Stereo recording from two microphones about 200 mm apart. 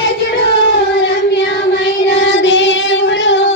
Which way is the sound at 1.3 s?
60° left (ahead or behind).